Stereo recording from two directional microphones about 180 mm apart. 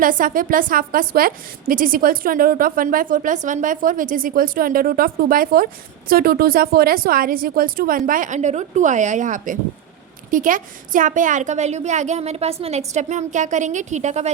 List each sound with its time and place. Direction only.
0.0 s a woman's voice: 50° right (ahead or behind)